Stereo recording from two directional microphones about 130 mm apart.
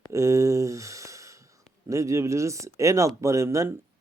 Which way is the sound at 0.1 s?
25° right (ahead or behind).